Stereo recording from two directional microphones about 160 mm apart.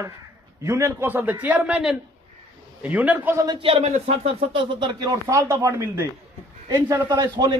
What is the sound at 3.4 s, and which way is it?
Speech, 30° right (ahead or behind).